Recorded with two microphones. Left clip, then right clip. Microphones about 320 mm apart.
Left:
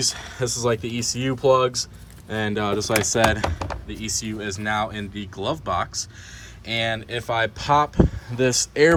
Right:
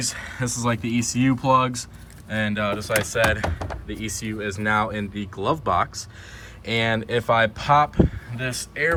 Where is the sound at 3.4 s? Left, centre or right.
Centre.